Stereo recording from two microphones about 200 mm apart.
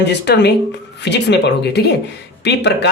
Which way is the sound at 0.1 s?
60° left (ahead or behind).